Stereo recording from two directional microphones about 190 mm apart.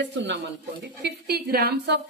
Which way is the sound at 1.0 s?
55° right (ahead or behind).